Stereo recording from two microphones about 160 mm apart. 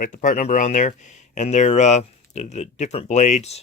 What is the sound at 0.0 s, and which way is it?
Speech, 55° left (ahead or behind).